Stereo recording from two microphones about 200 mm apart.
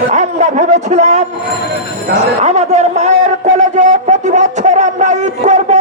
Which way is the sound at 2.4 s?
35° right (ahead or behind).